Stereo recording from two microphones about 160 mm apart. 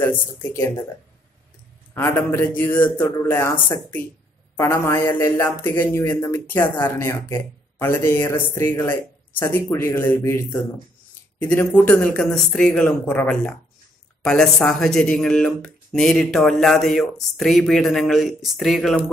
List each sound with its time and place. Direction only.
0.0 s speech: 15° left (ahead or behind)
2.0 s speech: 15° left (ahead or behind); by 19.0 s centre (ahead or behind)